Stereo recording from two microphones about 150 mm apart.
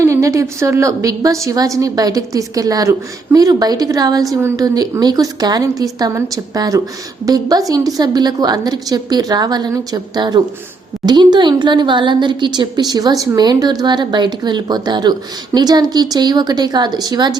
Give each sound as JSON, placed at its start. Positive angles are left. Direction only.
{"t": 0.0, "sound": "a woman's voice", "side_deg": -20}